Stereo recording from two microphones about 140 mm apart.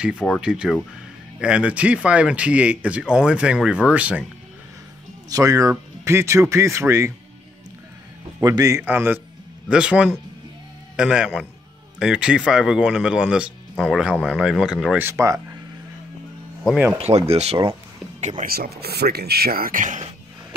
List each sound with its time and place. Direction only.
0.0 s speech: 5° right (ahead or behind)
5.3 s speech: 25° right (ahead or behind)
8.4 s speech: 25° right (ahead or behind)
8.8 s speech: 10° right (ahead or behind)
15.0 s speech: 20° right (ahead or behind)
17.0 s speech: 50° right (ahead or behind)
18.4 s speech: 90° right; by 20.1 s 65° right (ahead or behind)